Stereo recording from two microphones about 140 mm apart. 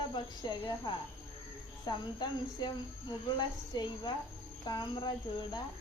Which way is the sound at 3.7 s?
30° left (ahead or behind).